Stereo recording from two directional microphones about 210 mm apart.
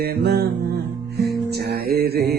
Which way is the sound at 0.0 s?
50° right (ahead or behind).